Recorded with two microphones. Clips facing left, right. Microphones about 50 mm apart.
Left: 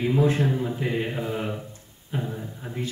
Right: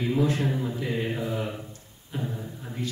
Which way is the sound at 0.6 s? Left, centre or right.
Left.